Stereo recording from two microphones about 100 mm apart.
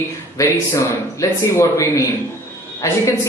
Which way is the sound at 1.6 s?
35° left (ahead or behind).